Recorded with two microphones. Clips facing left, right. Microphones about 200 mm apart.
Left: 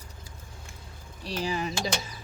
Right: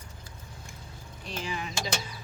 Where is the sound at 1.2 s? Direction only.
40° left (ahead or behind).